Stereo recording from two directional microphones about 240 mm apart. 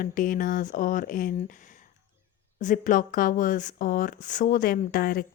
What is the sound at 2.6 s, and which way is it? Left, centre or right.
Speech, left.